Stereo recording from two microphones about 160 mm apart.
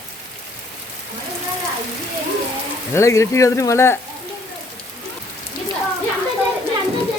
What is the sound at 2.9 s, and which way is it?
Speech, 20° left (ahead or behind).